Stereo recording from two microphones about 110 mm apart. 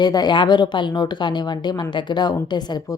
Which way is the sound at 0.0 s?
40° left (ahead or behind).